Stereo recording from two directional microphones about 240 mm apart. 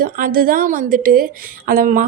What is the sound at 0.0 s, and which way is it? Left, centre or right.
A woman's voice, right.